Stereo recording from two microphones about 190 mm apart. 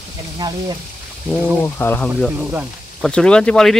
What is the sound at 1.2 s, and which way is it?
Speech, 10° left (ahead or behind).